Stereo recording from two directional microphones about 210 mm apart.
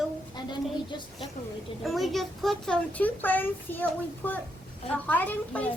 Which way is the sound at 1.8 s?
Centre (ahead or behind).